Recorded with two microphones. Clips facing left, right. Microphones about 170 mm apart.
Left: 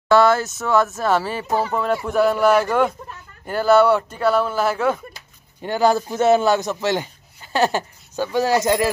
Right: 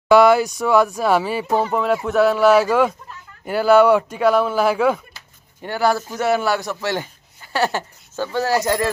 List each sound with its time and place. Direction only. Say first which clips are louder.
0.1 s speech: right 3 dB; 15° right (ahead or behind)
5.6 s a man's voice: left 2 dB; 20° left (ahead or behind)